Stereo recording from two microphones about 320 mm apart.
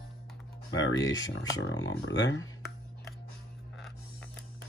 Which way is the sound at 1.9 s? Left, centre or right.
Left.